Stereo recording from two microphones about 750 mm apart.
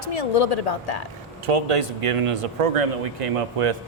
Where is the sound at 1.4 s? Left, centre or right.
Right.